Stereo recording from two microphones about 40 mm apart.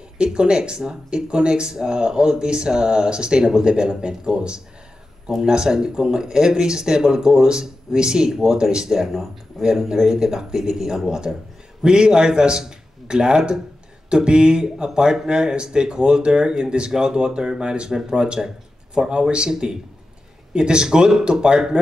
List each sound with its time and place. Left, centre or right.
0.2 s a man's voice: right